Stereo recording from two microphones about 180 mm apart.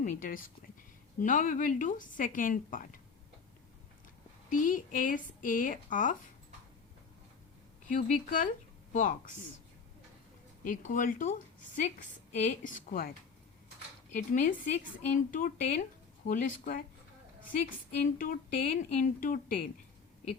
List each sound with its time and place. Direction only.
0.0 s a woman's voice: 50° left (ahead or behind)
4.4 s a woman's voice: 45° left (ahead or behind)
7.9 s a woman's voice: 45° left (ahead or behind)
10.6 s a woman's voice: 45° left (ahead or behind)